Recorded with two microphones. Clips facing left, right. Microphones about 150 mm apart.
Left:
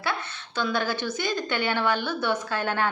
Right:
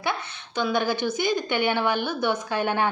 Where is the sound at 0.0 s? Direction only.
15° right (ahead or behind).